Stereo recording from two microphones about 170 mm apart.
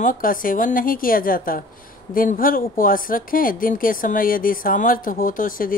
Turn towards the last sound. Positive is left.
turn(degrees=55)  # may be behind; listen again after turning